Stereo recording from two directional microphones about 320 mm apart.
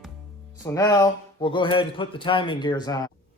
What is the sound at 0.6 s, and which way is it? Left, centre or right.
Speech, centre.